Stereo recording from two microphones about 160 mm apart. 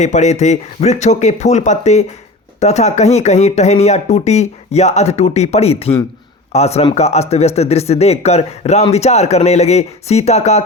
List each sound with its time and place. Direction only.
0.0 s speech: 45° left (ahead or behind)